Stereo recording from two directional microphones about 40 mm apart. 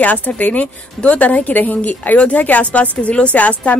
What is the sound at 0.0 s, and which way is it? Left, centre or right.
Speech, left.